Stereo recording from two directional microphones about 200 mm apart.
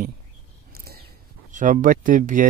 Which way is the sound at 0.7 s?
50° right (ahead or behind).